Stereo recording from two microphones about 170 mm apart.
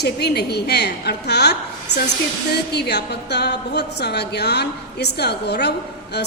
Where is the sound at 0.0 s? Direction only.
70° left (ahead or behind).